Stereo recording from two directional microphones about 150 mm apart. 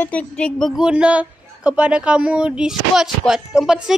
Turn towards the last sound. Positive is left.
turn(degrees=-5)  # may be behind; listen again after turning